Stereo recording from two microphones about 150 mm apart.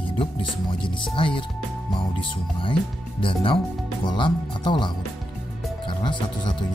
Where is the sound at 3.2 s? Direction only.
35° left (ahead or behind).